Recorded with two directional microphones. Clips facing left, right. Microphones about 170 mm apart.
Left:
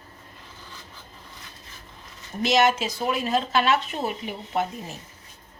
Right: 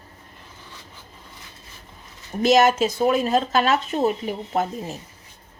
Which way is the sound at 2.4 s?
45° right (ahead or behind).